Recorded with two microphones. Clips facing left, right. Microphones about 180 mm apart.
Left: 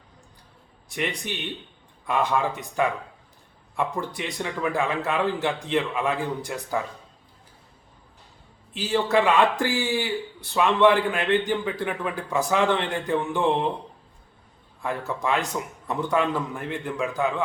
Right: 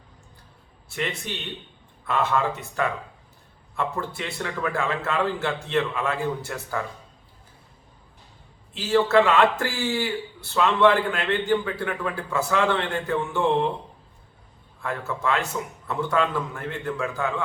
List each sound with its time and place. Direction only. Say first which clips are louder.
0.9 s a man's voice: left 1 dB; 15° left (ahead or behind)
8.7 s a man's voice: right 3 dB; 15° left (ahead or behind)
14.8 s a man's voice: left 1 dB; 15° left (ahead or behind)